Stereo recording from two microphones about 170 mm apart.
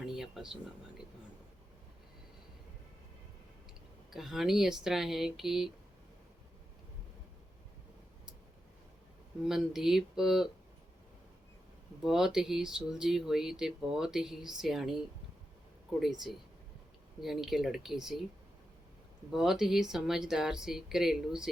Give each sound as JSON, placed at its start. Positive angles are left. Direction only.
{"t": 0.0, "sound": "a sound", "side_deg": 0}
{"t": 4.1, "sound": "speech", "side_deg": 0}
{"t": 9.4, "sound": "speech", "side_deg": 0}
{"t": 12.0, "sound": "speech", "side_deg": 0}
{"t": 17.2, "sound": "speech", "side_deg": 0}
{"t": 19.3, "sound": "speech", "side_deg": 0}